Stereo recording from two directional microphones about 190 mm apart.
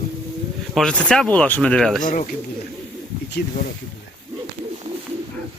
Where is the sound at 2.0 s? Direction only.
45° left (ahead or behind).